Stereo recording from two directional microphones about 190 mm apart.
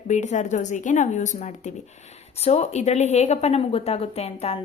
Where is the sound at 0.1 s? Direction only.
40° left (ahead or behind).